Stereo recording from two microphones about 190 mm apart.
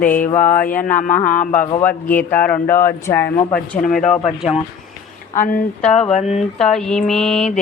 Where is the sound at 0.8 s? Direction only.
45° left (ahead or behind).